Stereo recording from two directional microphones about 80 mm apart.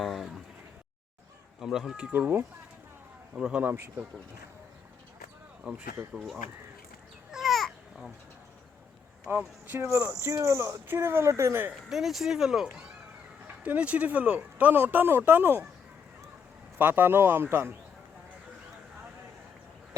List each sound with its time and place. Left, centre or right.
0.0 s a sound: centre
1.6 s speech: centre
2.0 s speech: right
3.3 s speech: centre
3.6 s speech: right
5.7 s speech: centre
7.3 s babbling: centre
9.3 s speech: right
11.7 s speech: centre; by 15.6 s right
16.7 s speech: right